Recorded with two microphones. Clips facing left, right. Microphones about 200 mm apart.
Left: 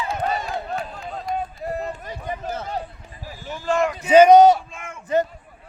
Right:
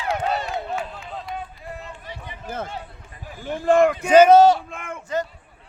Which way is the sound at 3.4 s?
55° right (ahead or behind).